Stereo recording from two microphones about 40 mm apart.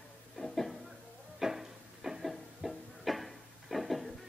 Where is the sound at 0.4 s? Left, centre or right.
Centre.